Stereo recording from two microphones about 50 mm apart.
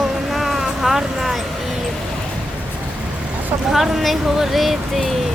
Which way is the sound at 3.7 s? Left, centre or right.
Centre.